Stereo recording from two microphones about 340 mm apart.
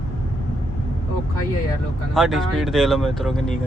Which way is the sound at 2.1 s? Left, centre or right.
Centre.